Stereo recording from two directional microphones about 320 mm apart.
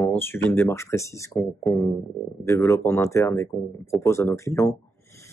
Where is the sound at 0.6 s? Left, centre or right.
Centre.